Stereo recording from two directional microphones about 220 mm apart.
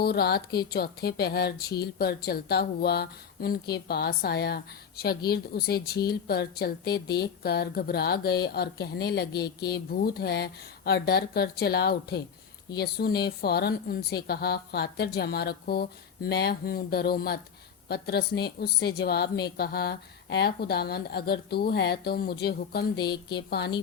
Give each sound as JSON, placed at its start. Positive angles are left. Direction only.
{"t": 0.0, "sound": "a woman's voice", "side_deg": 45}